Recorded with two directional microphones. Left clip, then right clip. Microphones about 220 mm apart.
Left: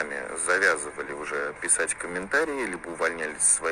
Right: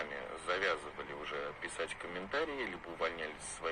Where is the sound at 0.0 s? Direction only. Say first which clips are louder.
Left 10 dB; 15° left (ahead or behind).